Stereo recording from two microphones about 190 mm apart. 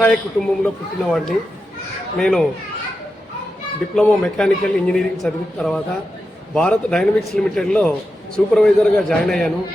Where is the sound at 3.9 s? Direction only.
5° left (ahead or behind).